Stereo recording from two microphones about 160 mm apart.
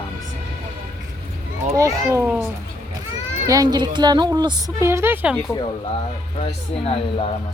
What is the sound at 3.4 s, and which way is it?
A woman's voice, 25° right (ahead or behind).